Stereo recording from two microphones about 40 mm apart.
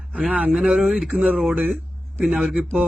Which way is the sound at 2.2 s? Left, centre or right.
Centre.